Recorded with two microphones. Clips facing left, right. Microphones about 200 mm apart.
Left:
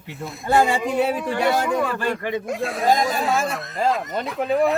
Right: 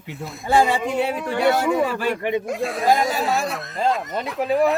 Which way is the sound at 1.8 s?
15° right (ahead or behind).